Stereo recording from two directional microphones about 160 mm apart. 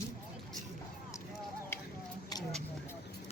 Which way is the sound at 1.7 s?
15° left (ahead or behind).